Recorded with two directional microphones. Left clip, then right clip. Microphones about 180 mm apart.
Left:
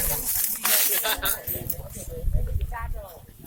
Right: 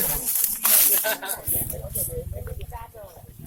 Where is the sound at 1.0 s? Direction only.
50° left (ahead or behind).